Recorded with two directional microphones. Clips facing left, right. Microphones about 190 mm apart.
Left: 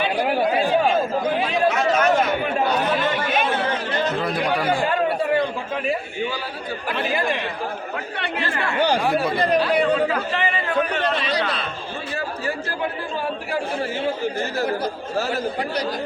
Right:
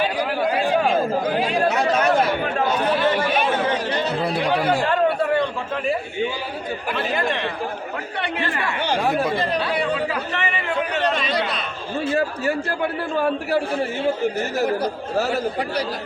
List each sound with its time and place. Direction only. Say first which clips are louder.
0.4 s chatter: right 1 dB; centre (ahead or behind)
1.5 s chatter: left 1 dB; 35° right (ahead or behind)
4.2 s chatter: right 1 dB; 30° right (ahead or behind)
7.1 s speech: even; 5° left (ahead or behind)
11.3 s a man's voice: even; 25° right (ahead or behind)